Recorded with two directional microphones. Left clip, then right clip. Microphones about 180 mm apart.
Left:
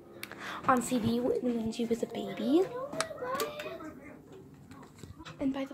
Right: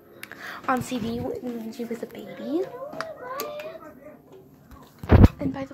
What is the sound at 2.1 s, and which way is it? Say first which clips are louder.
Speech: even; 25° left (ahead or behind).